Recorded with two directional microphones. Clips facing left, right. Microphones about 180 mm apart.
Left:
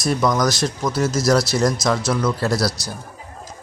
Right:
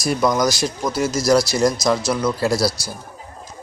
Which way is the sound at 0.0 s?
Centre (ahead or behind).